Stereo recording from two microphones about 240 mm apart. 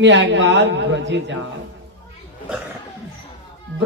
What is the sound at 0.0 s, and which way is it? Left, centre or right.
A man's voice, right.